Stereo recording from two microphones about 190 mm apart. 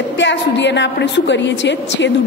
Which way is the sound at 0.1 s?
70° left (ahead or behind).